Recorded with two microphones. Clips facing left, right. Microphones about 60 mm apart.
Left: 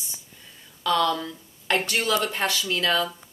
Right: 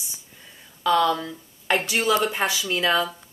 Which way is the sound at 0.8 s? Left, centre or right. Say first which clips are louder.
Right 3 dB; centre.